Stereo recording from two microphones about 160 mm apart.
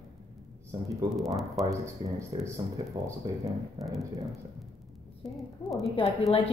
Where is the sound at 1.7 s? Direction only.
20° right (ahead or behind).